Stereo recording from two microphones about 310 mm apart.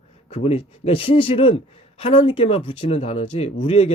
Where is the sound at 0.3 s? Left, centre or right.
Centre.